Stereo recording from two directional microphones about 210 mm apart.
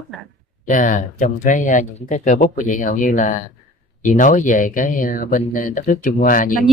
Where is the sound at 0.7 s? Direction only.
35° left (ahead or behind).